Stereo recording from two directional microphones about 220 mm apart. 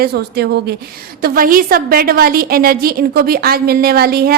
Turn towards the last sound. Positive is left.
turn(degrees=-45)  # may be behind; listen again after turning